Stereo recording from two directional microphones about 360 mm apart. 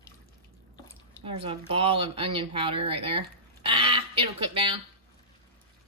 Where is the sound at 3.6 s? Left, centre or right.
Centre.